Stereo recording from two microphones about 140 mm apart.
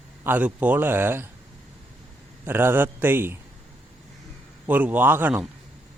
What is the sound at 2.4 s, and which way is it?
Speech, 15° right (ahead or behind).